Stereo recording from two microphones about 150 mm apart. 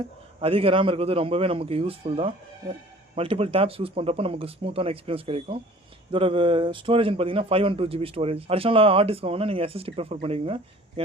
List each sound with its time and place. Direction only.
0.0 s a man's voice: 40° right (ahead or behind)